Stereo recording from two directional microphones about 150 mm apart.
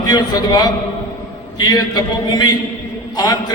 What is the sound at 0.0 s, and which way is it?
A man's voice, 25° left (ahead or behind).